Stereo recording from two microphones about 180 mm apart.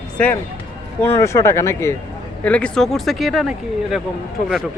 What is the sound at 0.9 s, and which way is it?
Speech, 15° left (ahead or behind).